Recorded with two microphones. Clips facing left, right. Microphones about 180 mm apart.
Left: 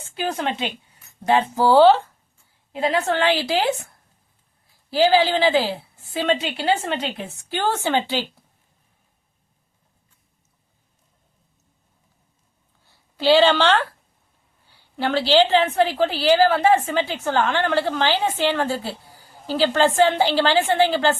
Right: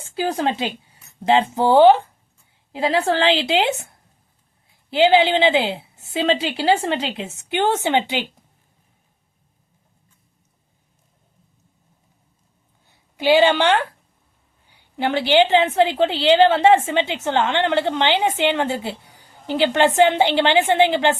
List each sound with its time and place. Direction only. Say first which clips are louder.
0.1 s a woman's voice: right 3 dB; 30° right (ahead or behind)
2.7 s a woman's voice: right 2 dB; 30° right (ahead or behind)
12.9 s a woman's voice: even; 15° right (ahead or behind)